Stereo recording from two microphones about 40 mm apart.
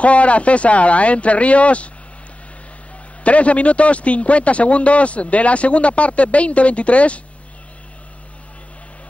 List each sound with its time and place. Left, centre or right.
0.0 s speech: left
3.3 s speech: left